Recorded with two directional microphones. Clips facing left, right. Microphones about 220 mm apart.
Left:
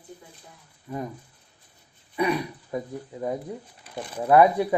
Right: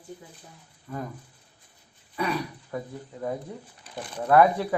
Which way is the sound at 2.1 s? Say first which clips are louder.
Left 4 dB; 15° left (ahead or behind).